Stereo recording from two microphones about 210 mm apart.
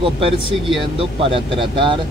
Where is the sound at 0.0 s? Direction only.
25° right (ahead or behind).